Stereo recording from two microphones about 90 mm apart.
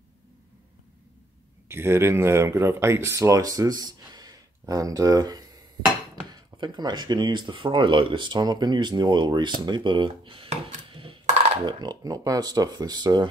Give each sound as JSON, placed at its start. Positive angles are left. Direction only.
{"t": 1.7, "sound": "speech", "side_deg": -30}
{"t": 11.6, "sound": "speech", "side_deg": -55}